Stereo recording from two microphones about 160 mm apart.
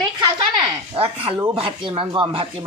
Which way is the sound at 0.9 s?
35° right (ahead or behind).